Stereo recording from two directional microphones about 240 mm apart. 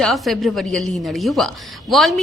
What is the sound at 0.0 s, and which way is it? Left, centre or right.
A woman's voice, centre.